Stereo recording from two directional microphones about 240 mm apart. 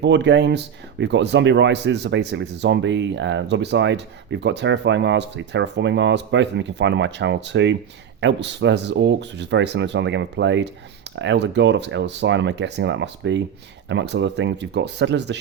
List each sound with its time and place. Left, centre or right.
0.0 s speech: right